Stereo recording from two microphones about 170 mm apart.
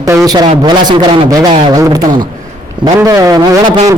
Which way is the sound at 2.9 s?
20° right (ahead or behind).